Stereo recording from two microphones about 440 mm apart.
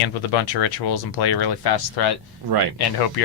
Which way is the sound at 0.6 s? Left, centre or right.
Left.